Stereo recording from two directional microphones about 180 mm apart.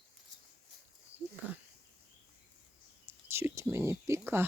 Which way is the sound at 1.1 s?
10° right (ahead or behind).